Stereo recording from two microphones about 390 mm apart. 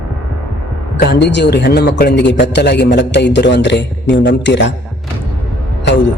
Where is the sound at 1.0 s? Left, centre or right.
Left.